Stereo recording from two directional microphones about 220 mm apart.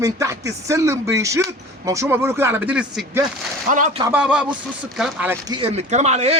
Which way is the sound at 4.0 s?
5° right (ahead or behind).